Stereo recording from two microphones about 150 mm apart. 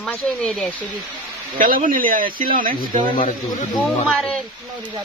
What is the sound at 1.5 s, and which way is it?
Speech, 65° right (ahead or behind).